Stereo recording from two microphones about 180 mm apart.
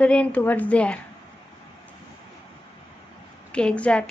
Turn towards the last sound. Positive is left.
turn(degrees=5)  # may be behind; listen again after turning